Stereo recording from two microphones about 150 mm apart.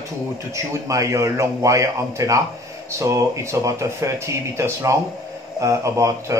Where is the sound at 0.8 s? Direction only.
20° right (ahead or behind).